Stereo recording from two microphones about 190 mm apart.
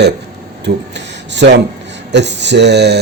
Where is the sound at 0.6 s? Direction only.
65° right (ahead or behind).